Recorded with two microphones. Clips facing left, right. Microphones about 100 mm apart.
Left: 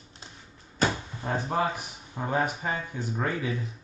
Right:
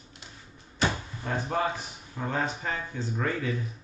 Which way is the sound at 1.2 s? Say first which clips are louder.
Left 1 dB; 20° left (ahead or behind).